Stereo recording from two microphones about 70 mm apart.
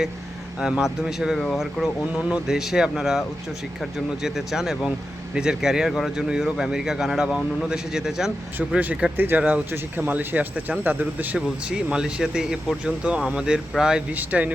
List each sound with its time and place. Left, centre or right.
0.6 s speech: centre
1.4 s speech: centre
1.8 s speech: centre
8.8 s speech: right
11.3 s speech: centre
14.2 s speech: right